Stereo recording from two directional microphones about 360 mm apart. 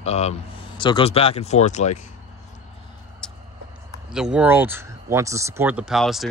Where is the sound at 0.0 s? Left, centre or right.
Centre.